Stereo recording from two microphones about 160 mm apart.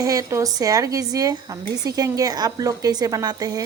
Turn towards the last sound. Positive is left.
turn(degrees=-25)  # may be behind; listen again after turning